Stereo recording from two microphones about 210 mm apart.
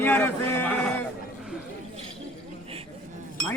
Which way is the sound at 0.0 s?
10° left (ahead or behind).